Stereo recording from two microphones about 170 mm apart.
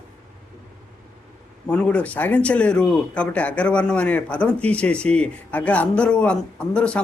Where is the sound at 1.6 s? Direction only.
5° left (ahead or behind).